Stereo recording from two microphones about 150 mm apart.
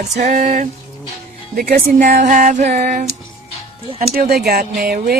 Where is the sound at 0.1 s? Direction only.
50° right (ahead or behind).